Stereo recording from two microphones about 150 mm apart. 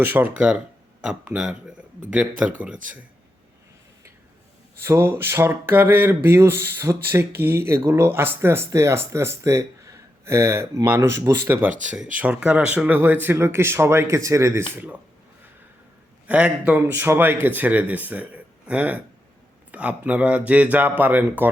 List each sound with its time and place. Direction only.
0.0 s speech: 15° right (ahead or behind)
4.9 s speech: 15° right (ahead or behind)
16.2 s speech: 10° right (ahead or behind)